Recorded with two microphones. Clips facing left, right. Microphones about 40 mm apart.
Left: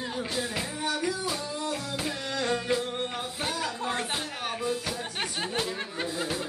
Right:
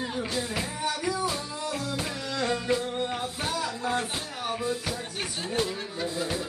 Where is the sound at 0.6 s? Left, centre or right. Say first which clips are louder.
Even; centre.